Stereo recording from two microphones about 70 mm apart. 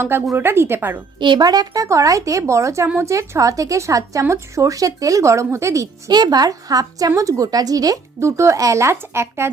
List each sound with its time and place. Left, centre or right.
0.3 s speech: right
1.3 s a woman's voice: right
6.1 s a woman's voice: right
8.2 s a woman's voice: right